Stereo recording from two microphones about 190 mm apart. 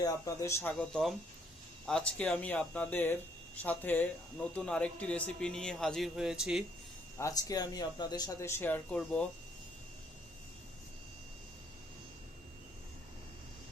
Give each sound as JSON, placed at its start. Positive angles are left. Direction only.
{"t": 0.0, "sound": "speech", "side_deg": 15}
{"t": 7.2, "sound": "speech", "side_deg": 20}